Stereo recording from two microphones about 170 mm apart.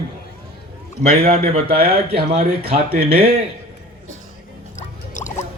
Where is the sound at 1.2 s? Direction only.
35° right (ahead or behind).